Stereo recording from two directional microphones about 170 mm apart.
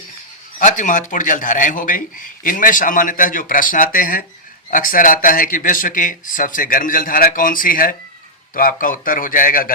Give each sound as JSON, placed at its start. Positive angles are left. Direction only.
{"t": 0.6, "sound": "a man's voice", "side_deg": 45}